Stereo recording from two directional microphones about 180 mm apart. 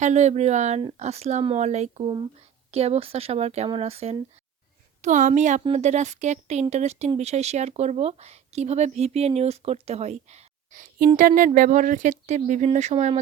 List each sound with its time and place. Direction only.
0.0 s speech: 40° right (ahead or behind)